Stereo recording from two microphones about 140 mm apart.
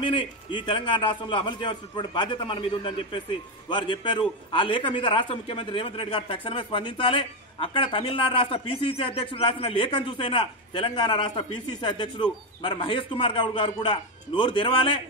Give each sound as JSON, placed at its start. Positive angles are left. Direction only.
{"t": 0.0, "sound": "a man's voice", "side_deg": 35}